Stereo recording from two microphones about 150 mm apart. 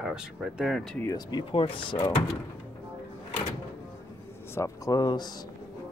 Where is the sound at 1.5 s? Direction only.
35° left (ahead or behind).